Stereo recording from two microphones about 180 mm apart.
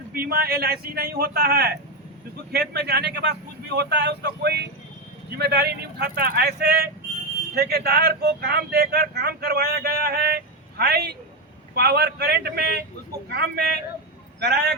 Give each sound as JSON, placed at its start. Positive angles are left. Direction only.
{"t": 0.1, "sound": "speech", "side_deg": -60}